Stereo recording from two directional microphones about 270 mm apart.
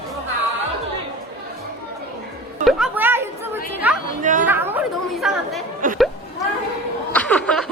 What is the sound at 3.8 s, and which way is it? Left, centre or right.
Chatter, centre.